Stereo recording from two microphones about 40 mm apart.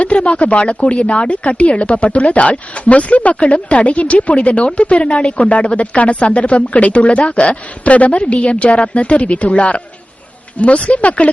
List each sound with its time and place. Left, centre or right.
0.3 s speech: left
10.8 s speech: left